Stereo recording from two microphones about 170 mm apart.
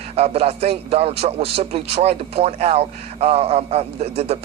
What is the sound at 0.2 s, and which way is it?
A man's voice, 35° right (ahead or behind).